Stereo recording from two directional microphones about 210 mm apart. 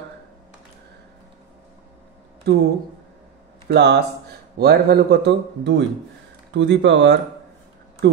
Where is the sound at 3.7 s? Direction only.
55° right (ahead or behind).